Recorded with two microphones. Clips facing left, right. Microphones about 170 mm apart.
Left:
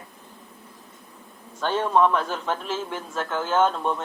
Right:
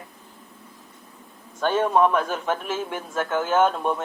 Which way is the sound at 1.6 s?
15° right (ahead or behind).